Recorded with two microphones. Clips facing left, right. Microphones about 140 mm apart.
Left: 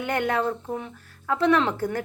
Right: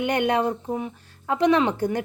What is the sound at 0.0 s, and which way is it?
A woman's voice, 20° right (ahead or behind).